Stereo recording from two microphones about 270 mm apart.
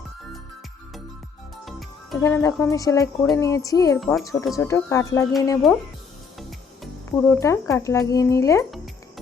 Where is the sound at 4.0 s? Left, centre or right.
Centre.